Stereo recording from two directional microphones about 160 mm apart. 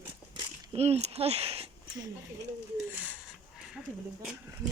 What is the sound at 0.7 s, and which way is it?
Speech, 40° right (ahead or behind).